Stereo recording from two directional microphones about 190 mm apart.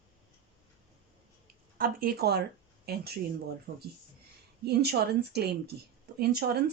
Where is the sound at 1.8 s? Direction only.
50° right (ahead or behind).